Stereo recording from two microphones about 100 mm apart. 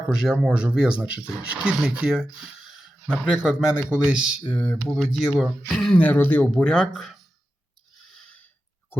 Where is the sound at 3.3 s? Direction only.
5° right (ahead or behind).